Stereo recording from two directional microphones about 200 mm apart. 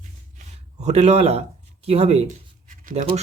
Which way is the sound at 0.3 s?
35° right (ahead or behind).